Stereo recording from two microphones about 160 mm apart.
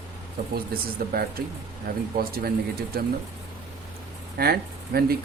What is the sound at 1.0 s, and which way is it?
Speech, 65° right (ahead or behind).